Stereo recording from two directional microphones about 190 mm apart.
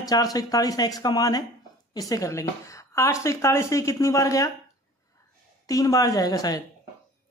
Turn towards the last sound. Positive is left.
turn(degrees=20)  # may be behind; listen again after turning